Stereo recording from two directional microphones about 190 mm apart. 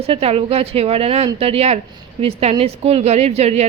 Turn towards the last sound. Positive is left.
turn(degrees=-35)  # may be behind; listen again after turning